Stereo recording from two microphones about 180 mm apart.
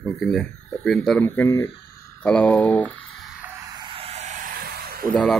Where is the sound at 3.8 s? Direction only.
30° right (ahead or behind); by 5.1 s 55° right (ahead or behind).